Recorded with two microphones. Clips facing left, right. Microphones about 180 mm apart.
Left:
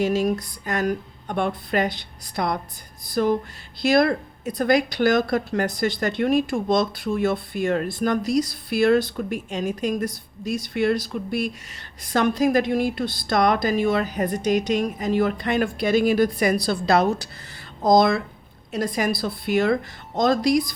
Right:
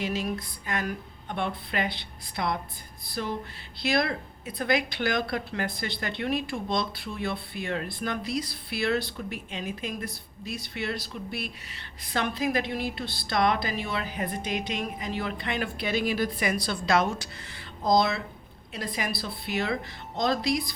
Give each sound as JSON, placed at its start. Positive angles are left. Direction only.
{"t": 0.0, "sound": "speech", "side_deg": 45}